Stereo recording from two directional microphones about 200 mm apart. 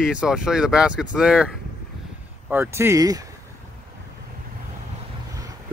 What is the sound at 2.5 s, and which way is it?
Speech, 10° right (ahead or behind).